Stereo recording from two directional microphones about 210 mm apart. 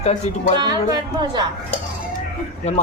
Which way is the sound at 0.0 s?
30° left (ahead or behind).